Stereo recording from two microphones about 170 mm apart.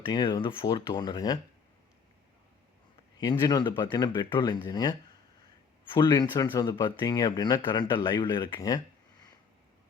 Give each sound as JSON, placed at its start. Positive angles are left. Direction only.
{"t": 0.0, "sound": "speech", "side_deg": 25}
{"t": 3.2, "sound": "speech", "side_deg": 25}